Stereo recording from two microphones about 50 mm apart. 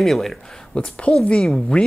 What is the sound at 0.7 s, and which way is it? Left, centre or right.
Speech, left.